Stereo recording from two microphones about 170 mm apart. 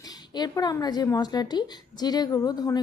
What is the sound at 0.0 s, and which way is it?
Speech, 25° left (ahead or behind).